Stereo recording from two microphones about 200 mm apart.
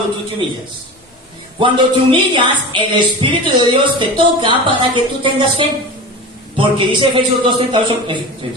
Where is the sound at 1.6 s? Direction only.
25° right (ahead or behind).